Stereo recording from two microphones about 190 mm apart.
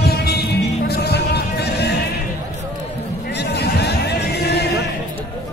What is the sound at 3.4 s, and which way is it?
Music, 60° left (ahead or behind).